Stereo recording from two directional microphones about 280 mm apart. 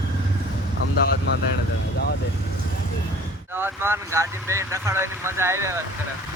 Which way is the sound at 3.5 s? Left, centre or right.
Centre.